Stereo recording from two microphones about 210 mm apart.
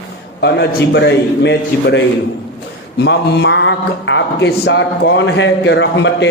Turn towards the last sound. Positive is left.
turn(degrees=55)  # may be behind; listen again after turning